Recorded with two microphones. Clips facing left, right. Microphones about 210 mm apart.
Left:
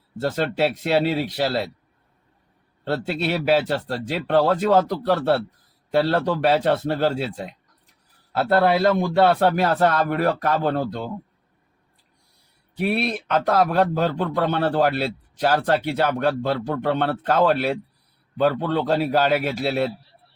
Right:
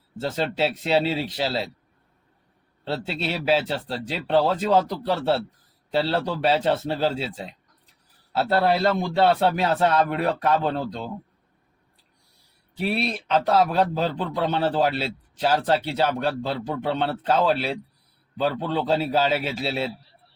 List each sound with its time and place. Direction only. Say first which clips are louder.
0.2 s a man's voice: left 3 dB; 55° left (ahead or behind)
2.9 s a man's voice: left 4 dB; 55° left (ahead or behind)
12.7 s a man's voice: left 3 dB; 55° left (ahead or behind)